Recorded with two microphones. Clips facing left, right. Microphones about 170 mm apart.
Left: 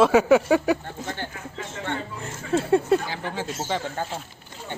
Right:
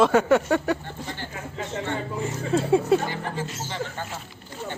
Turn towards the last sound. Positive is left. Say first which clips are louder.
# left 3 dB
turn(degrees=90)